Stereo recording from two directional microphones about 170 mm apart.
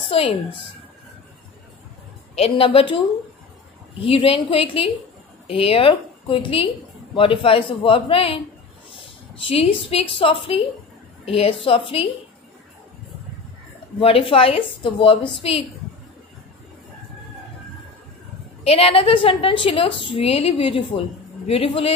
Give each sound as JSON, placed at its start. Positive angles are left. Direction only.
{"t": 2.3, "sound": "a woman's voice", "side_deg": 35}
{"t": 4.0, "sound": "a woman's voice", "side_deg": 30}
{"t": 13.9, "sound": "a woman's voice", "side_deg": 30}
{"t": 18.6, "sound": "a woman's voice", "side_deg": 35}